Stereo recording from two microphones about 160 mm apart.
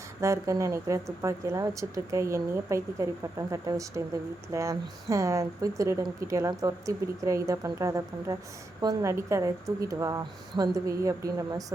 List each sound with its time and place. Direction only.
0.2 s speech: 20° right (ahead or behind)